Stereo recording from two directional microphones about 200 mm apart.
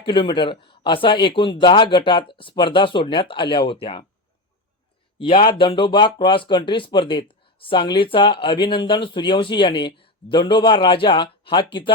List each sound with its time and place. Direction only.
0.0 s speech: 25° left (ahead or behind)
5.1 s speech: 25° left (ahead or behind)